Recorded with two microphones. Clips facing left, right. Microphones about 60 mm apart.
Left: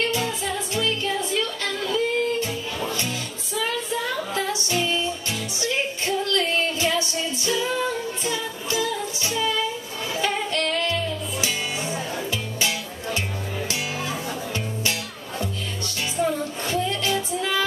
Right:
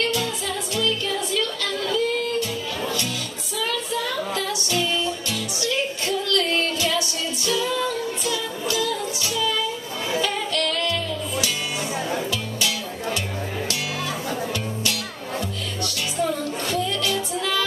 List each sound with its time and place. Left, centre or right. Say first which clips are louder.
0.0 s music: even; left
3.5 s music: even; left
10.2 s singing: left 4 dB; left
12.3 s music: even; left
14.5 s music: right 1 dB; left
16.2 s music: even; left